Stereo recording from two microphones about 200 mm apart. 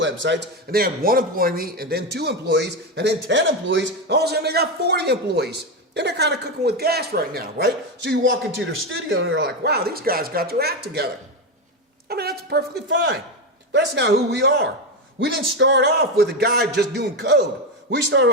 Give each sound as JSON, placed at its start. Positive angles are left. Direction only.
{"t": 0.0, "sound": "a man's voice", "side_deg": -65}